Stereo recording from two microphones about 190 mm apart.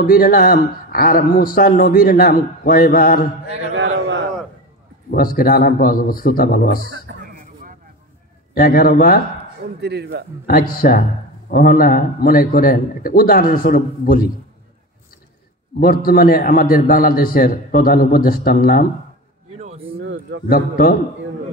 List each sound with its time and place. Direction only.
0.0 s speech: 50° left (ahead or behind)
3.7 s a man's voice: 75° right (ahead or behind)
5.1 s speech: 50° left (ahead or behind)
7.1 s a sound: 65° right (ahead or behind)
8.5 s speech: 50° left (ahead or behind)
9.8 s speech: 60° right (ahead or behind)
10.4 s speech: 50° left (ahead or behind)
15.8 s speech: 50° left (ahead or behind)
19.5 s a sound: 35° right (ahead or behind)
20.0 s a sound: 75° right (ahead or behind)
20.4 s speech: 50° left (ahead or behind)